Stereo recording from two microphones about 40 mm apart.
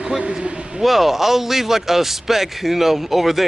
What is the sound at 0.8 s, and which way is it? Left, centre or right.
Speech, centre.